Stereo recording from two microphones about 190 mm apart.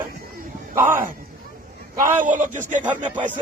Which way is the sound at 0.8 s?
10° right (ahead or behind).